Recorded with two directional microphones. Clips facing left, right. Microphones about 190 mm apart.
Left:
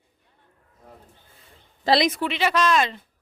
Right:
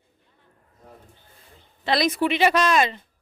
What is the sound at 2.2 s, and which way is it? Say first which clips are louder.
Speech: right 3 dB; 15° right (ahead or behind).